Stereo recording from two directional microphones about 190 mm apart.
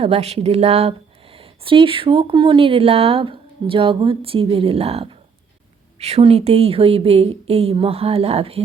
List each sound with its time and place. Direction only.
0.0 s speech: 30° right (ahead or behind)